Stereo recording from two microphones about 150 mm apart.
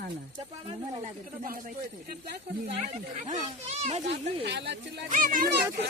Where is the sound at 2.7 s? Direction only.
50° right (ahead or behind).